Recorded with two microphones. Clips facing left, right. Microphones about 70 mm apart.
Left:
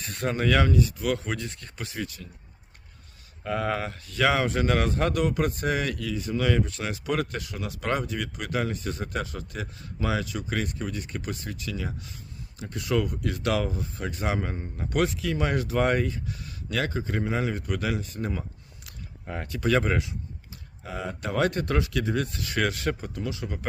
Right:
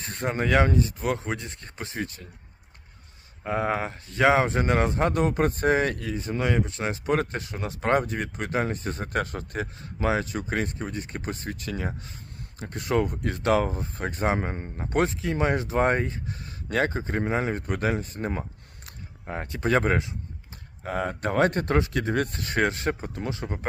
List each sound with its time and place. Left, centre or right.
0.0 s speech: right
3.4 s speech: right
19.2 s speech: right
20.8 s speech: right